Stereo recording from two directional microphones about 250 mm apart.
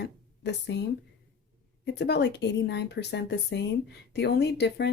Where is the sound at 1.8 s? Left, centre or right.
Left.